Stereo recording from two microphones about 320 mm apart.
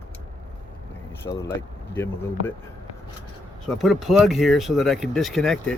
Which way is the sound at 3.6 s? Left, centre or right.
Centre.